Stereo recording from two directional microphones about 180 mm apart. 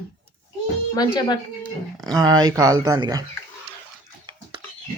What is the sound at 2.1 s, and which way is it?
Speech, 20° right (ahead or behind).